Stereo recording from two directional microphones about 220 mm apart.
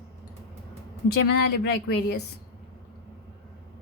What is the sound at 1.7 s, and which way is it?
Speech, 45° left (ahead or behind).